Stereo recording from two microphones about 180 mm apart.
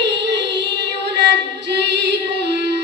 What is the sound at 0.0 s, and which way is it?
Child singing, 85° right.